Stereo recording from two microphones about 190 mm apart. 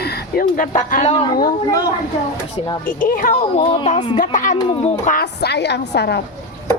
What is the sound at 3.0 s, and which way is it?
Speech, 50° left (ahead or behind).